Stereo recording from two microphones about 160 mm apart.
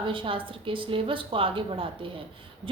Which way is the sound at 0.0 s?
30° right (ahead or behind).